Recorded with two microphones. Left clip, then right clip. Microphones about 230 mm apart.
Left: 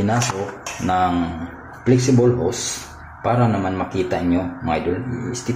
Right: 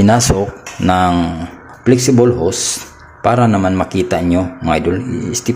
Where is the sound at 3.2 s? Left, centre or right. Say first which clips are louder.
Right 7 dB; right.